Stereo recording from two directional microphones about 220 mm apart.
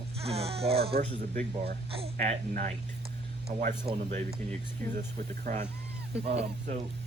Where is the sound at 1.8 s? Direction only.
25° right (ahead or behind).